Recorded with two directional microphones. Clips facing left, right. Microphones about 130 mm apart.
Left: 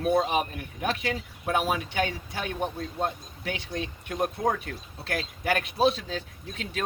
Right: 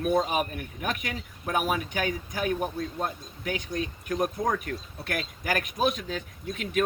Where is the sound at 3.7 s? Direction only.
30° left (ahead or behind).